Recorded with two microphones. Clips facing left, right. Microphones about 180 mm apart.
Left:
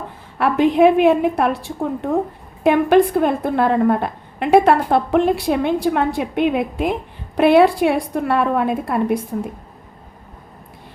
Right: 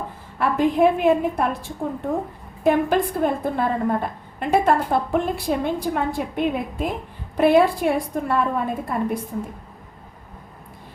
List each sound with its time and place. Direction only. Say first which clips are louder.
0.3 s a woman's voice: left 4 dB; 75° left (ahead or behind)